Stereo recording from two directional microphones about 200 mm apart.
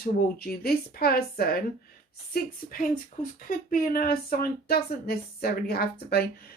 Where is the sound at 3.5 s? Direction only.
45° left (ahead or behind).